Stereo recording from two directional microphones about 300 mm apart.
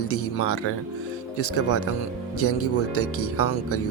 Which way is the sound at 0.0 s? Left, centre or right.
Left.